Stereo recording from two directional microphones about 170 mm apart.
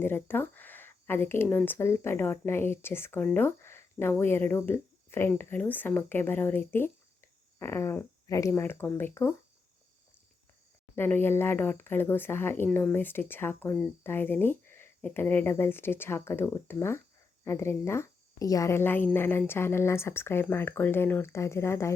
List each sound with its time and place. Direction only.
0.0 s speech: 10° left (ahead or behind)
10.9 s speech: 15° left (ahead or behind)